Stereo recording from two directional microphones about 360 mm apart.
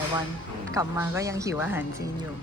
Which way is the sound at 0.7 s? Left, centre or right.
Centre.